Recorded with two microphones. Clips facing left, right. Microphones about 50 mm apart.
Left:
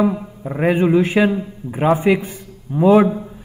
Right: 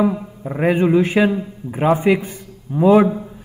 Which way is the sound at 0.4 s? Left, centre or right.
Centre.